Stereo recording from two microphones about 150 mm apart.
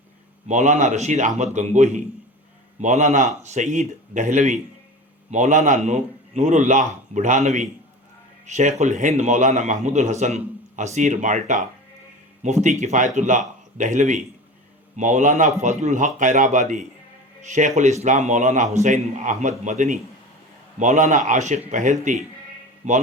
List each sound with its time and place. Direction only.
0.4 s a man's voice: 50° right (ahead or behind)